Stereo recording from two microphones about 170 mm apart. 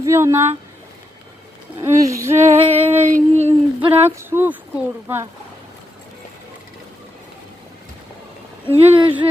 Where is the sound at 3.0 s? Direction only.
45° right (ahead or behind).